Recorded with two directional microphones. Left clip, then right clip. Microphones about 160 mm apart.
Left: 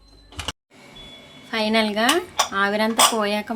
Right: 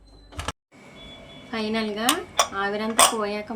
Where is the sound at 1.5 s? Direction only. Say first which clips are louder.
Left 7 dB; 55° left (ahead or behind).